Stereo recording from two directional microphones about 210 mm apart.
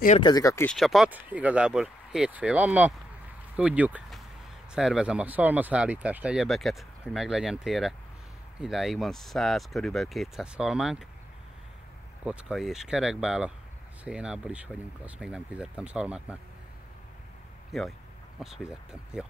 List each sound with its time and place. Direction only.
0.2 s speech: 15° left (ahead or behind)
0.7 s speech: centre (ahead or behind)
12.3 s speech: 5° right (ahead or behind)
17.7 s speech: centre (ahead or behind)